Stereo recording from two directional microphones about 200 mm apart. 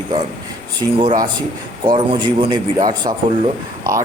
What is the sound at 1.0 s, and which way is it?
A man's voice, 20° right (ahead or behind).